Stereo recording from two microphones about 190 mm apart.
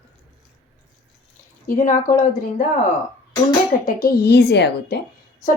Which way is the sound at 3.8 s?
50° left (ahead or behind).